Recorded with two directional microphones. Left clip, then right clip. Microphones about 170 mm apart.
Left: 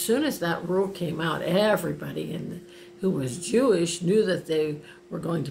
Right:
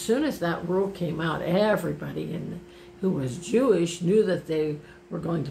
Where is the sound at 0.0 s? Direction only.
15° left (ahead or behind).